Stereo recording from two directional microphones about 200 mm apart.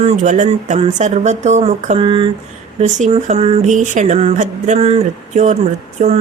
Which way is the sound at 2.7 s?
35° right (ahead or behind).